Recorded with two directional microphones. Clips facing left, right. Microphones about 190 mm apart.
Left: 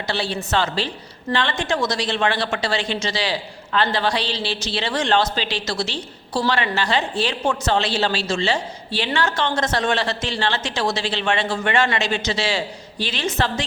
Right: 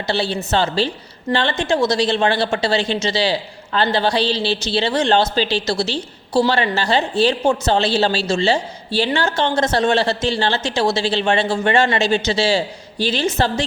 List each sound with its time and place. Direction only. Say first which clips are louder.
0.1 s a woman's voice: right 4 dB; 30° right (ahead or behind)